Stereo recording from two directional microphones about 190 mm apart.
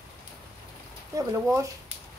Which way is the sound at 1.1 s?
15° right (ahead or behind).